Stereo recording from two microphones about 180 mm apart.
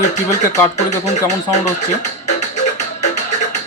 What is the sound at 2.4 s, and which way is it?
Music, 40° left (ahead or behind).